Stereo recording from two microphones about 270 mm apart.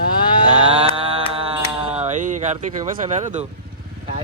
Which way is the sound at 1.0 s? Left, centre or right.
Right.